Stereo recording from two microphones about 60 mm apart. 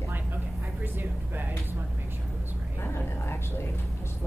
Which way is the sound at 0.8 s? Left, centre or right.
Right.